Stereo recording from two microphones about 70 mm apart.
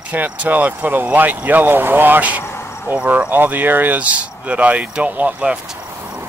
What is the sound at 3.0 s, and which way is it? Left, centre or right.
Speech, right.